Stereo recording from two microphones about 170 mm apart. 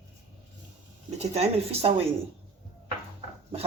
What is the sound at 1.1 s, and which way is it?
Speech, 40° right (ahead or behind).